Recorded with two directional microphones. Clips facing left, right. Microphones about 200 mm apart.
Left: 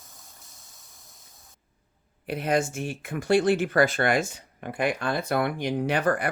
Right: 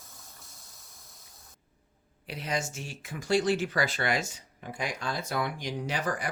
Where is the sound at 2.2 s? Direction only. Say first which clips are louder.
Left 8 dB; 55° left (ahead or behind).